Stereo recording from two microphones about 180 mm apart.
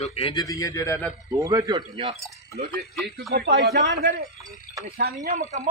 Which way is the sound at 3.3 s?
60° right (ahead or behind).